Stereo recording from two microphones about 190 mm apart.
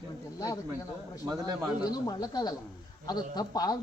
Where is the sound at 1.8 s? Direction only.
20° left (ahead or behind).